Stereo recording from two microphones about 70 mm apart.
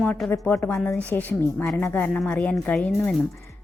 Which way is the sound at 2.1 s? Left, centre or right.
Centre.